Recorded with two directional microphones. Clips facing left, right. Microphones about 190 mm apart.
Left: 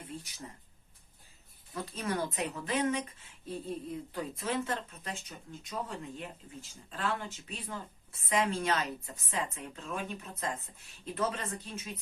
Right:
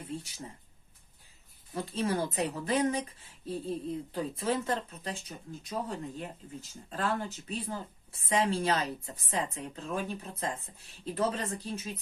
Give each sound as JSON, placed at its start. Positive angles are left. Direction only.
{"t": 1.7, "sound": "speech", "side_deg": -30}